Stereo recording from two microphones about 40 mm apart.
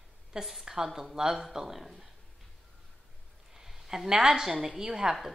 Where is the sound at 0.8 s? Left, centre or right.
Centre.